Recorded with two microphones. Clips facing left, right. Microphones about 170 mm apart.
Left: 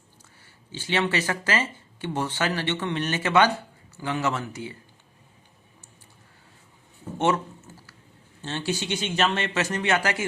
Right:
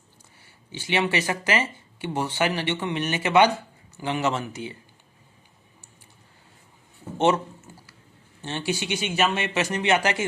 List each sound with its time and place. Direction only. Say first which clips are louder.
0.7 s speech: right 1 dB; 15° right (ahead or behind)
8.4 s speech: right 1 dB; 15° right (ahead or behind)